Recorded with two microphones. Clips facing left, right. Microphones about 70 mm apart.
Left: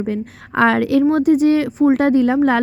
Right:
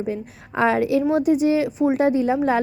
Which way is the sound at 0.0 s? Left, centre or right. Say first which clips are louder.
Left 4 dB; left.